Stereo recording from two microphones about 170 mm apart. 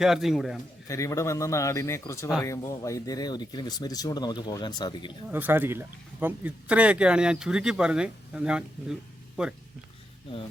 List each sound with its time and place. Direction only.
0.0 s speech: centre (ahead or behind)
0.9 s a man's voice: 20° left (ahead or behind)
5.3 s speech: 10° right (ahead or behind)